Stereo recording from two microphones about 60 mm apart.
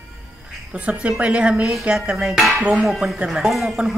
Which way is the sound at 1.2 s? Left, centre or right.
Centre.